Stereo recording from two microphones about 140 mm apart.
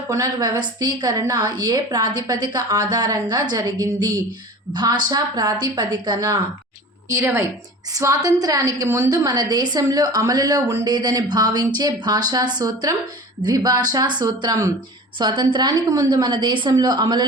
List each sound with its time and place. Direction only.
0.1 s a woman's voice: 25° right (ahead or behind)